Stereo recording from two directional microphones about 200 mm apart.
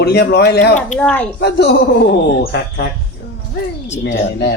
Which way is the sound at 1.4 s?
55° left (ahead or behind).